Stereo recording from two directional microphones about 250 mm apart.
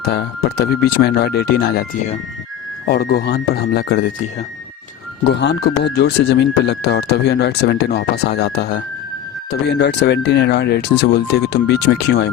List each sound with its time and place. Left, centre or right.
0.0 s speech: left
5.3 s speech: left